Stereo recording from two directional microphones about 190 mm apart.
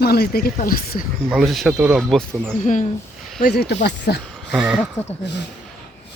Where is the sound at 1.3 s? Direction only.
Centre (ahead or behind).